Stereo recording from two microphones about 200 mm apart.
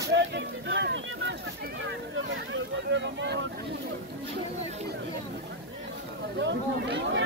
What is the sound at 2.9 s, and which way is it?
Speech, 65° right (ahead or behind).